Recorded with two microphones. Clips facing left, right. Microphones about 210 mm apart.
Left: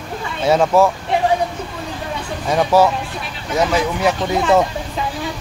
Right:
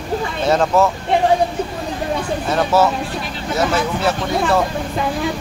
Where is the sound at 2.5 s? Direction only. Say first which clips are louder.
Left 2 dB; 15° left (ahead or behind).